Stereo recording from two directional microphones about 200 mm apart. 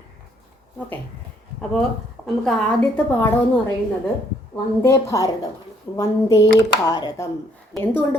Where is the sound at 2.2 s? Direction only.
5° left (ahead or behind).